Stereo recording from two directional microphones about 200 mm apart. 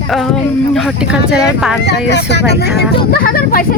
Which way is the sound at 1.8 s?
60° left (ahead or behind).